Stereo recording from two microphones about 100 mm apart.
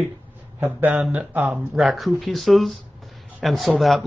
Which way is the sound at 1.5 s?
Centre (ahead or behind).